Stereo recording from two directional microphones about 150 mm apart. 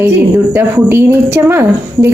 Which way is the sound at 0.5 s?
15° right (ahead or behind).